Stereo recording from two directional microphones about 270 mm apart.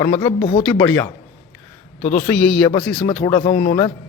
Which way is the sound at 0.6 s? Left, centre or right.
Centre.